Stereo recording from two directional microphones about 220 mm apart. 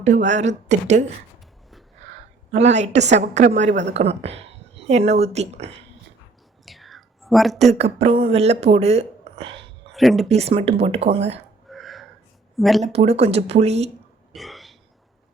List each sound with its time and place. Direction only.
0.3 s a woman's voice: 30° right (ahead or behind)
2.5 s a woman's voice: 30° right (ahead or behind)
6.7 s whispering: centre (ahead or behind)
7.7 s speech: 30° right (ahead or behind)
9.9 s speech: centre (ahead or behind)
10.2 s speech: 30° right (ahead or behind)
11.7 s a sound: centre (ahead or behind)
12.5 s speech: centre (ahead or behind)
12.8 s speech: 30° right (ahead or behind)
14.3 s burping: centre (ahead or behind)